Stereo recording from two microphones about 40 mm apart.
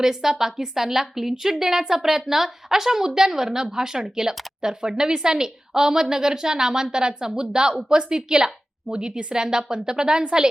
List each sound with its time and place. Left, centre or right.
0.0 s a woman's voice: centre